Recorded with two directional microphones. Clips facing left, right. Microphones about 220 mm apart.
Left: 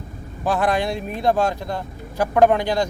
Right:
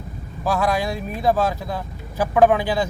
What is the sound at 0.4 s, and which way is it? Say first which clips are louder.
Speech: left 1 dB; centre (ahead or behind).